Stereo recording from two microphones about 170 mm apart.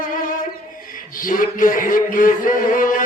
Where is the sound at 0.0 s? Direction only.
55° left (ahead or behind).